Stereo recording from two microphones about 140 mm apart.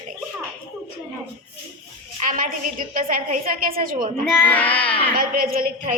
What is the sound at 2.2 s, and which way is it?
A woman's voice, 75° right (ahead or behind).